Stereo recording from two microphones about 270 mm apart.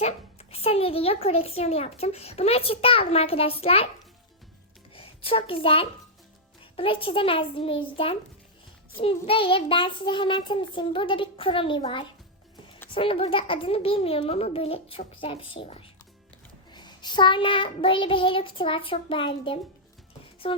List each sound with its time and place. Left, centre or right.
0.0 s a woman's voice: left
4.9 s music: centre
5.6 s a woman's voice: centre